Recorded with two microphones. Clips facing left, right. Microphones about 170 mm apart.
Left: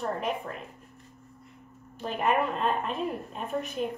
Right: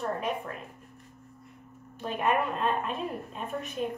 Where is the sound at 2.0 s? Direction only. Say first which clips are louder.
Left 1 dB; centre (ahead or behind).